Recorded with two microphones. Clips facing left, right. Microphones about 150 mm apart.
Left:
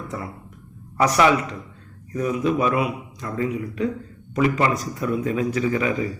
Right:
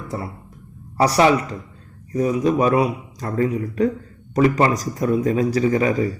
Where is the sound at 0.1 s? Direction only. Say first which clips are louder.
Right 3 dB; 35° right (ahead or behind).